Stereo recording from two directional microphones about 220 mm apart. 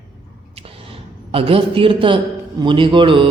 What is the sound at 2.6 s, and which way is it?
Mantra, 20° right (ahead or behind).